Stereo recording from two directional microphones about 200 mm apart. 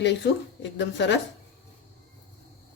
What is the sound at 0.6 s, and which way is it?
Speech, 60° left (ahead or behind).